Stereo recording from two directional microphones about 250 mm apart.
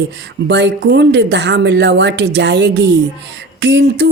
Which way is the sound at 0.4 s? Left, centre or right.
Right.